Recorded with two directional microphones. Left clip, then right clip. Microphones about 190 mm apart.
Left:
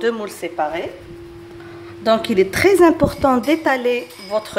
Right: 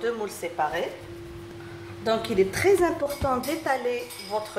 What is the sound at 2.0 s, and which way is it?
A woman's voice, 55° left (ahead or behind).